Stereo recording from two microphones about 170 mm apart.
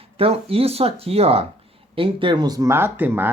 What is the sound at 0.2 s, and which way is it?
Speech, 35° right (ahead or behind).